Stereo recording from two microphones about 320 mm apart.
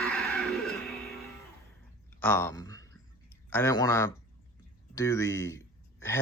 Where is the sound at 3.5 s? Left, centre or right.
Centre.